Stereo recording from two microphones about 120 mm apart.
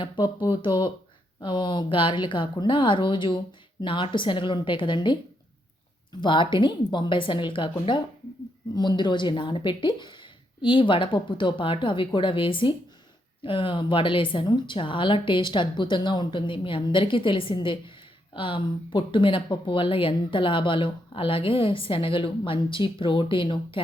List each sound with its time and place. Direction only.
0.5 s a woman's voice: 40° left (ahead or behind)
6.1 s a woman's voice: 45° left (ahead or behind)